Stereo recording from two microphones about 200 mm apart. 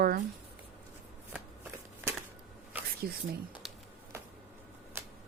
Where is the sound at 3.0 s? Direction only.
50° right (ahead or behind).